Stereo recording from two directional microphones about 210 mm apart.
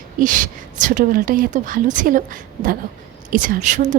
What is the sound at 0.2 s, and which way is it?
Speech, 40° right (ahead or behind).